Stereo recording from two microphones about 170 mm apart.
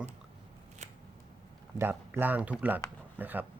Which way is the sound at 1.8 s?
10° right (ahead or behind).